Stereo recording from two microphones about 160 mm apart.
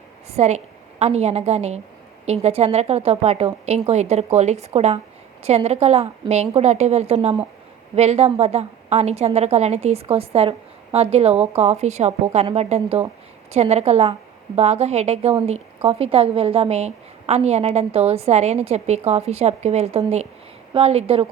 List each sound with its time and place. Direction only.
0.3 s a woman's voice: 45° right (ahead or behind)